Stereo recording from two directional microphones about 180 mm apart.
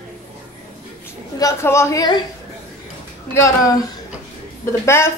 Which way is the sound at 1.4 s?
15° left (ahead or behind).